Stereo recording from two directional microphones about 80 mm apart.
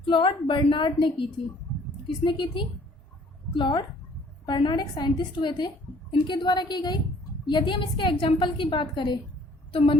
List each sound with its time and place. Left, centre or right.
0.0 s a woman's voice: left
2.0 s a woman's voice: left
7.4 s a woman's voice: left